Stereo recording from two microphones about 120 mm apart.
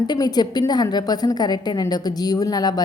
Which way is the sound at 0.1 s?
35° left (ahead or behind).